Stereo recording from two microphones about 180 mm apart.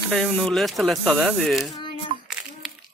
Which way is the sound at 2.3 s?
5° right (ahead or behind).